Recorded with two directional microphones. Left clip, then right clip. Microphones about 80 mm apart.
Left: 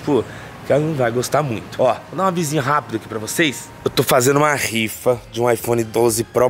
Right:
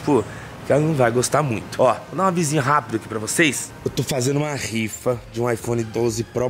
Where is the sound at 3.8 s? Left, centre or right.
Left.